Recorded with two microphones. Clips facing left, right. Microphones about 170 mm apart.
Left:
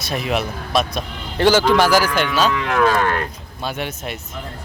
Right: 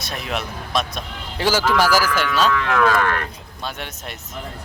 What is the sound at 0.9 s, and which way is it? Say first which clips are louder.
Speech: left 6 dB; 5° right (ahead or behind).